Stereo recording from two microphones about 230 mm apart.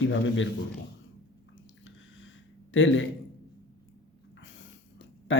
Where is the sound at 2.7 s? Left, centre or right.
Left.